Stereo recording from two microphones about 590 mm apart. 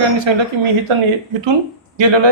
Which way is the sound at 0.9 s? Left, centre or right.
Right.